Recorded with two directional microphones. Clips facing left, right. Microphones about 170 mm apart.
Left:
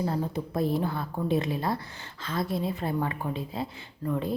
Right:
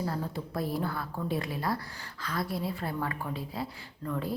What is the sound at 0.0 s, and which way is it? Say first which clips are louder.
A woman's voice: left 4 dB; 20° left (ahead or behind).